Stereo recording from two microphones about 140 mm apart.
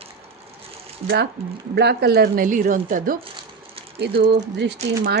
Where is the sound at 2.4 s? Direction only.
80° right.